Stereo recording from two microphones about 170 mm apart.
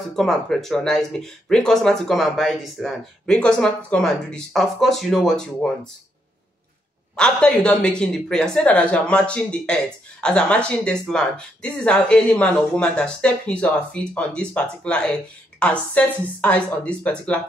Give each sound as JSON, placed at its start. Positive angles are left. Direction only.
{"t": 0.1, "sound": "speech", "side_deg": 0}
{"t": 7.2, "sound": "speech", "side_deg": 5}